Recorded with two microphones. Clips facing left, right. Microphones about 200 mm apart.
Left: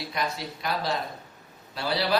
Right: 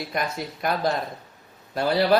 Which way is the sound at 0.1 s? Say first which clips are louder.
Right 3 dB; 50° right (ahead or behind).